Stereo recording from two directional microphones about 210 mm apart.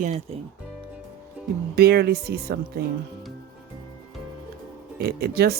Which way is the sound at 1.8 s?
50° right (ahead or behind).